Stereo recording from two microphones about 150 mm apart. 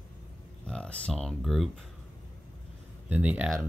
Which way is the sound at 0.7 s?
5° left (ahead or behind).